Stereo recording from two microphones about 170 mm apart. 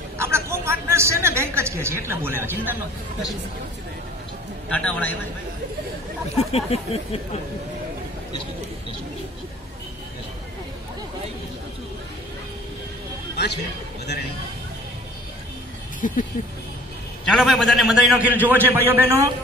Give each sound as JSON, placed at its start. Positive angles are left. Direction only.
{"t": 0.2, "sound": "a woman's voice", "side_deg": -15}
{"t": 4.6, "sound": "a man's voice", "side_deg": 5}
{"t": 6.3, "sound": "speech", "side_deg": 35}
{"t": 16.0, "sound": "speech", "side_deg": 50}
{"t": 17.2, "sound": "a man's voice", "side_deg": 0}